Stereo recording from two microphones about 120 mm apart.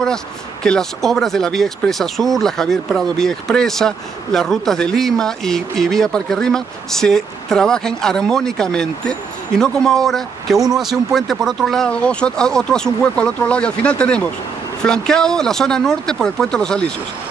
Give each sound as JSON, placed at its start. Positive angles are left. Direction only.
{"t": 0.7, "sound": "speech", "side_deg": 5}